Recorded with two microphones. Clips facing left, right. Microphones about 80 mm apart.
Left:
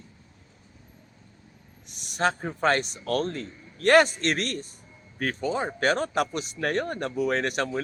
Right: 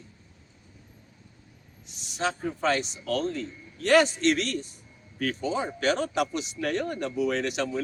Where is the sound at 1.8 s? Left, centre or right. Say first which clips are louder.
Left 4 dB; left.